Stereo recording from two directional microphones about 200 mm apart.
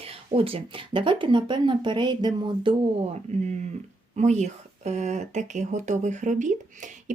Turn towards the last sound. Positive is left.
turn(degrees=-40)  # may be behind; listen again after turning